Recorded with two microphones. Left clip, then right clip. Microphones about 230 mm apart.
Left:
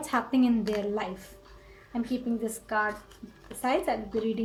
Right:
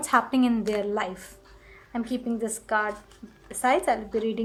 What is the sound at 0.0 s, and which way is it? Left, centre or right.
Speech, right.